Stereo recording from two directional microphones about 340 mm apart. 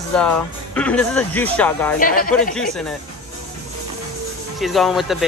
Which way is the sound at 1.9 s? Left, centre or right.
Left.